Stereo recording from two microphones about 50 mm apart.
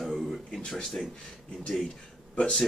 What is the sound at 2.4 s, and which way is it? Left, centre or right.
Speech, centre.